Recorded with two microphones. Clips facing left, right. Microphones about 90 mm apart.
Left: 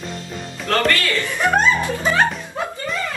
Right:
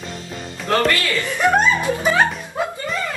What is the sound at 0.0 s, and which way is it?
Music, centre (ahead or behind).